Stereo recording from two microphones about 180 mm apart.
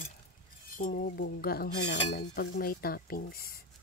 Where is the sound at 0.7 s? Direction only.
50° left (ahead or behind).